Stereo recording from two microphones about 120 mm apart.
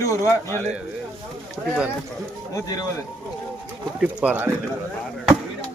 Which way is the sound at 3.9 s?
10° right (ahead or behind).